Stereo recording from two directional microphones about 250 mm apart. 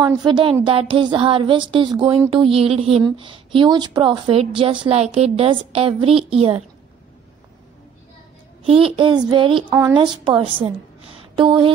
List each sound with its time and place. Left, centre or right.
0.0 s speech: centre
8.6 s speech: right
10.6 s a sound: right